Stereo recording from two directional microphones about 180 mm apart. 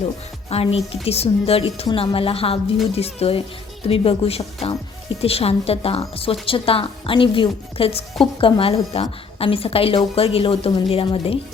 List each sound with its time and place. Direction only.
0.5 s a woman's voice: 35° left (ahead or behind)